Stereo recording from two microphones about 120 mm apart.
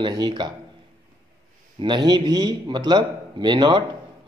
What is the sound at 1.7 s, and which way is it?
A man's voice, 40° right (ahead or behind).